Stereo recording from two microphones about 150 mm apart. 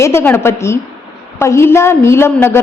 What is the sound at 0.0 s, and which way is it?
A woman's voice, 15° left (ahead or behind).